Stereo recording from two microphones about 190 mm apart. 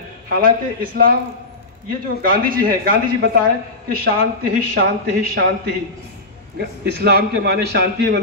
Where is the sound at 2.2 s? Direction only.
50° right (ahead or behind).